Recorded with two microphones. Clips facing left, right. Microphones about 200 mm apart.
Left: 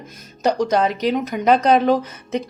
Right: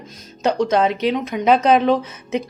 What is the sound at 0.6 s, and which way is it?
Speech, centre (ahead or behind).